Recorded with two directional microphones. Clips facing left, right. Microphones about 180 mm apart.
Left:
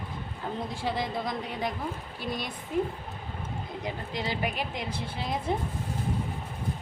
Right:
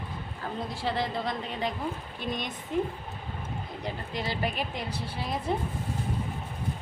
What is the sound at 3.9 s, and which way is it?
Speech, 15° left (ahead or behind).